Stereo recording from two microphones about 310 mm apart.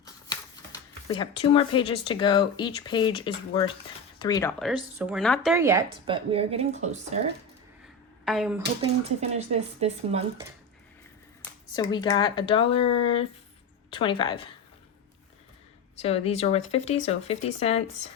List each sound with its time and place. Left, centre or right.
0.0 s speech: centre
4.6 s speech: centre; by 7.2 s right
8.2 s speech: centre
8.8 s speech: right
11.7 s speech: centre
13.9 s speech: centre
16.0 s speech: centre